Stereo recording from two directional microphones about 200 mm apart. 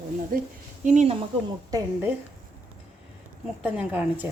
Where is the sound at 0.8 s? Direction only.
35° right (ahead or behind).